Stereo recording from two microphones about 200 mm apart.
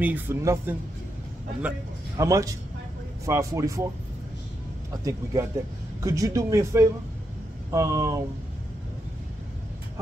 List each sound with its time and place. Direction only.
0.0 s speech: 10° right (ahead or behind)
2.1 s speech: 15° right (ahead or behind)
4.9 s speech: 15° right (ahead or behind)